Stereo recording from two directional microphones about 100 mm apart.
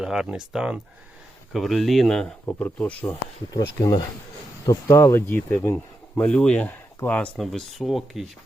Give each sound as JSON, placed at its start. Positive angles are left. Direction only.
{"t": 0.0, "sound": "speech", "side_deg": -5}
{"t": 2.5, "sound": "speech", "side_deg": 15}
{"t": 3.5, "sound": "speech", "side_deg": 35}
{"t": 7.3, "sound": "speech", "side_deg": 0}